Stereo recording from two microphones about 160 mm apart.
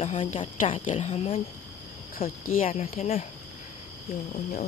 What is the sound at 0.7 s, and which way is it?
Speech, 45° left (ahead or behind).